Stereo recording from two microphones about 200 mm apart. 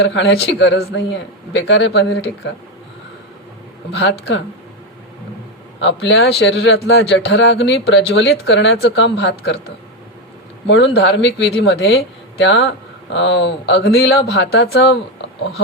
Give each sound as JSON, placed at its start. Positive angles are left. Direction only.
{"t": 0.0, "sound": "speech", "side_deg": 60}
{"t": 3.9, "sound": "speech", "side_deg": 55}
{"t": 5.8, "sound": "speech", "side_deg": 60}
{"t": 10.7, "sound": "speech", "side_deg": 65}